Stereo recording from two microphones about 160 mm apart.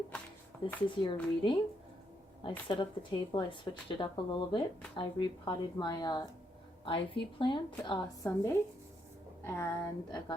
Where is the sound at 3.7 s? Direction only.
25° left (ahead or behind).